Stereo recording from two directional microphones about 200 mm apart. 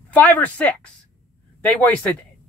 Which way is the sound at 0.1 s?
10° left (ahead or behind).